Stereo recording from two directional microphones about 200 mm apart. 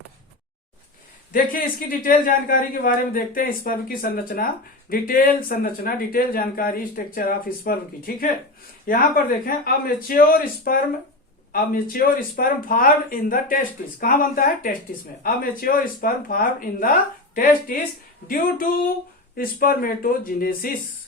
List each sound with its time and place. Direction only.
1.3 s a man's voice: 45° left (ahead or behind)
19.4 s a man's voice: 45° left (ahead or behind)